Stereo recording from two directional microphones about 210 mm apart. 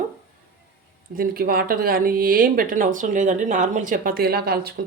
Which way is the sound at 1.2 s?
45° right (ahead or behind).